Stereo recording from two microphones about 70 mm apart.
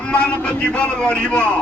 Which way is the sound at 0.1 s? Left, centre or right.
Centre.